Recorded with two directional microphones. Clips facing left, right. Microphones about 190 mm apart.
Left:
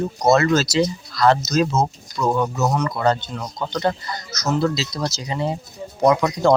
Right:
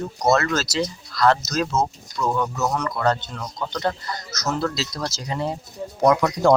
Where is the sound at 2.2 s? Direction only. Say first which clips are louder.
Left 3 dB; 20° left (ahead or behind).